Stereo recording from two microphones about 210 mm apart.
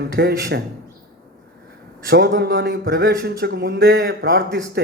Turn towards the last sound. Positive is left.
turn(degrees=-50)  # may be behind; listen again after turning